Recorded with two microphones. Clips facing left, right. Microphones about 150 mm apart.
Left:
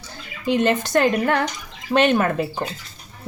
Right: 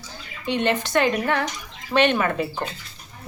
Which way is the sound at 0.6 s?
40° left (ahead or behind).